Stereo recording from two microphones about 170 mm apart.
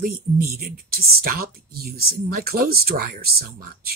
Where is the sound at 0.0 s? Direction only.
60° right (ahead or behind).